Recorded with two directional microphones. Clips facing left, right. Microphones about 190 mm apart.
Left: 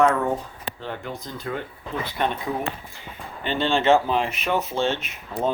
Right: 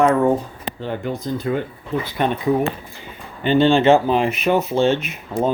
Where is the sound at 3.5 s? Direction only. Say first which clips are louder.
Right 6 dB; 5° right (ahead or behind).